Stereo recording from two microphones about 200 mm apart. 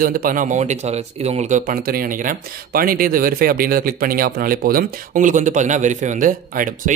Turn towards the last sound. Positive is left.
turn(degrees=-40)  # may be behind; listen again after turning